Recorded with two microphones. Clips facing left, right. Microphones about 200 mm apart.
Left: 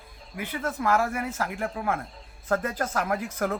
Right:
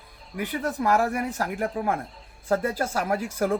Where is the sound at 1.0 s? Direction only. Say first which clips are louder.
Right 3 dB; 35° right (ahead or behind).